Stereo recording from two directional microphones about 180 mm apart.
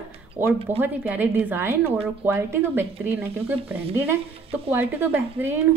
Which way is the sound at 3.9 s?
15° right (ahead or behind).